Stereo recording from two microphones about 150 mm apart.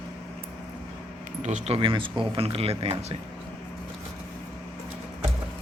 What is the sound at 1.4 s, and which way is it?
Speech, 50° right (ahead or behind).